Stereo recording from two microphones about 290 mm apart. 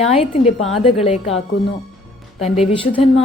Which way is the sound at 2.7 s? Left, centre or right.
Centre.